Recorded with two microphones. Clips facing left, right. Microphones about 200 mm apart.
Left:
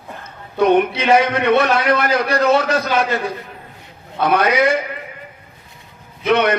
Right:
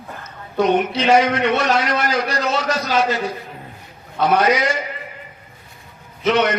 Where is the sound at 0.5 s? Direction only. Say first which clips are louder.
Left 3 dB; 55° left (ahead or behind).